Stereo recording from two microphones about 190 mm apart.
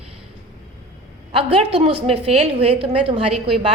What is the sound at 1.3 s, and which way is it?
A woman's voice, 30° right (ahead or behind).